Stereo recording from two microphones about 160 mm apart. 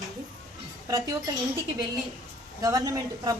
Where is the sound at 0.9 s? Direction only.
25° right (ahead or behind).